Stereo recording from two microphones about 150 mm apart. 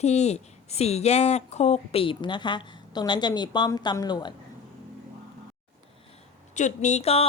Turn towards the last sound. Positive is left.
turn(degrees=45)  # may be behind; listen again after turning